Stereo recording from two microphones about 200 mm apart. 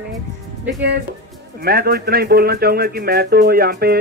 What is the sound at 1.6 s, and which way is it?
Speech, 50° right (ahead or behind).